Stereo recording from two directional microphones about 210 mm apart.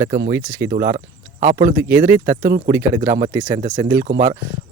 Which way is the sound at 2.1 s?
15° right (ahead or behind).